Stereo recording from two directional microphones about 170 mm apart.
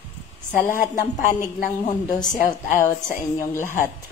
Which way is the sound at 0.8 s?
50° left (ahead or behind).